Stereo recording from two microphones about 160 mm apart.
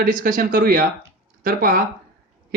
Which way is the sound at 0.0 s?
60° right (ahead or behind).